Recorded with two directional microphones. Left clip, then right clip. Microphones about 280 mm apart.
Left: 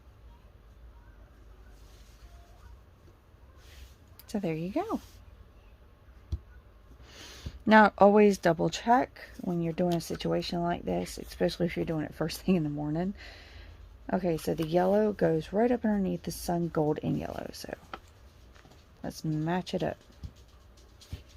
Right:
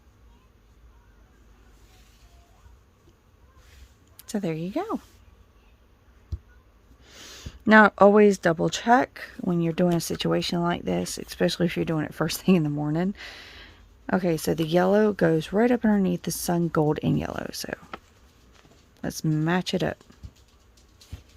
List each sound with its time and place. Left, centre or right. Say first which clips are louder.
4.2 s speech: right 3 dB; right
7.1 s speech: right 4 dB; centre; by 17.7 s right
19.2 s speech: right 6 dB; right